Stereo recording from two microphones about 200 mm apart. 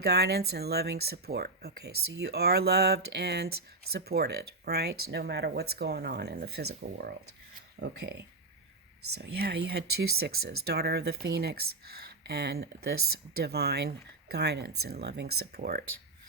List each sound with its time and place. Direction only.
0.0 s speech: 55° right (ahead or behind)